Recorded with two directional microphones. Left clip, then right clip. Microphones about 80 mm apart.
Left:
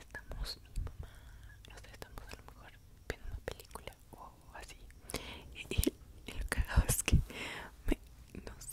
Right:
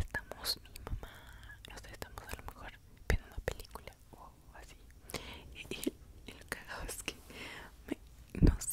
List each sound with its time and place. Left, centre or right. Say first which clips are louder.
0.0 s whispering: right 8 dB; centre
3.7 s whispering: left 1 dB; centre
5.8 s whispering: left 4 dB; centre
8.3 s whispering: right 16 dB; right